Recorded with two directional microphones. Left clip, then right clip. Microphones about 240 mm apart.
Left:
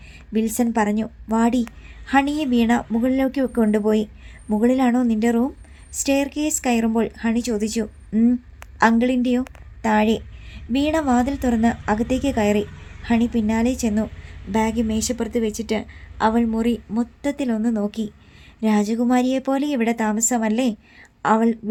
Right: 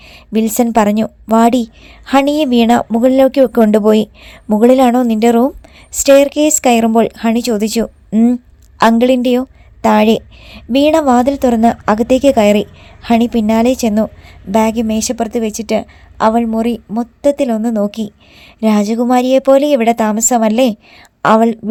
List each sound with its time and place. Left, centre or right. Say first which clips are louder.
0.1 s a woman's voice: right 8 dB; right